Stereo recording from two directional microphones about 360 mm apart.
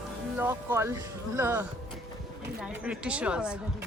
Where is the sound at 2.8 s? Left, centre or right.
Centre.